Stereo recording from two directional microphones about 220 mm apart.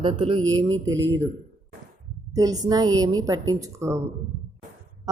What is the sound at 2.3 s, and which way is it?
A woman's voice, 15° right (ahead or behind).